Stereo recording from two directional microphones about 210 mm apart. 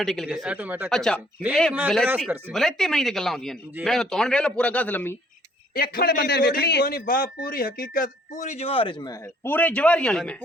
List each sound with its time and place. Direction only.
0.0 s speech: centre (ahead or behind)
0.9 s speech: centre (ahead or behind)
5.7 s a man's voice: 45° left (ahead or behind); by 10.3 s 5° left (ahead or behind)